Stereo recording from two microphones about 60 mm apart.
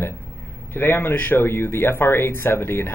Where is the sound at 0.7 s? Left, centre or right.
Left.